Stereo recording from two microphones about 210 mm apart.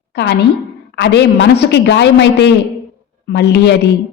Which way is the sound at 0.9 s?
55° left (ahead or behind).